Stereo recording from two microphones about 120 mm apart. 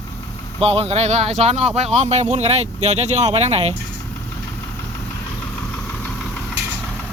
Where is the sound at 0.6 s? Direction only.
60° right (ahead or behind).